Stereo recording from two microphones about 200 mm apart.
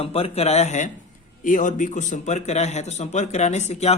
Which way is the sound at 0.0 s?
30° left (ahead or behind).